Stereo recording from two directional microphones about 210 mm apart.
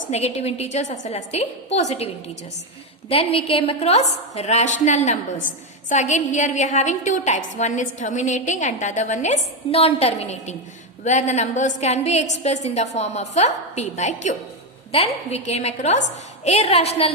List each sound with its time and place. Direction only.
0.1 s a woman's voice: 30° left (ahead or behind)
3.1 s a woman's voice: 25° left (ahead or behind)